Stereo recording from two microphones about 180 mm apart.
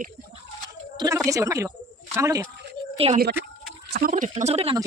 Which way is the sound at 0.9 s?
20° right (ahead or behind).